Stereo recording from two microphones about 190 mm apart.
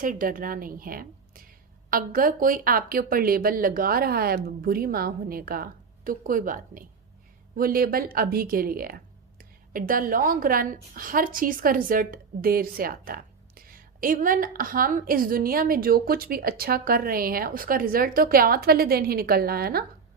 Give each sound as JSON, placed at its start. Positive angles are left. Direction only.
{"t": 0.0, "sound": "a woman's voice", "side_deg": -45}